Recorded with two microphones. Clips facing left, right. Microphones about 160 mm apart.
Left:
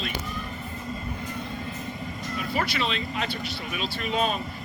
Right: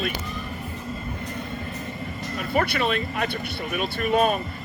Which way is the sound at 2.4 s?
55° right (ahead or behind).